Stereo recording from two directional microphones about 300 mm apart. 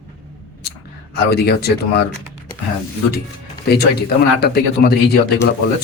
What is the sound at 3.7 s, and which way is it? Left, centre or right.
Speech, left.